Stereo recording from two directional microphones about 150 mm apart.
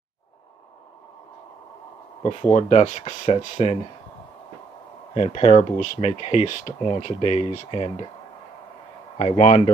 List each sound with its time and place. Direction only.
2.2 s speech: 45° left (ahead or behind)
5.1 s speech: 45° left (ahead or behind)
9.2 s speech: 45° left (ahead or behind)